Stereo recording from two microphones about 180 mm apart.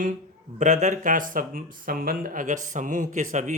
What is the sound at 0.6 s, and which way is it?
A man's voice, 40° right (ahead or behind).